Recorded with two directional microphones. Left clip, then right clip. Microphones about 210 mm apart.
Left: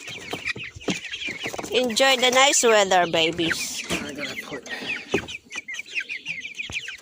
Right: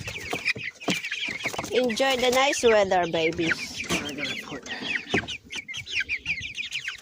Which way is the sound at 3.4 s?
15° right (ahead or behind).